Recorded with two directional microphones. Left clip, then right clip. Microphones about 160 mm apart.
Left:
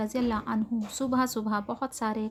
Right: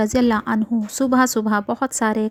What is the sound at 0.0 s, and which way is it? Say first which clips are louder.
A woman's voice: right 11 dB; 50° right (ahead or behind).